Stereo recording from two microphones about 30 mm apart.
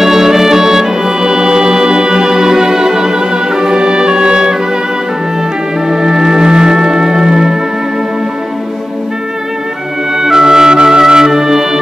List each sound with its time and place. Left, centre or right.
0.0 s music: centre
5.9 s music: right
10.1 s music: centre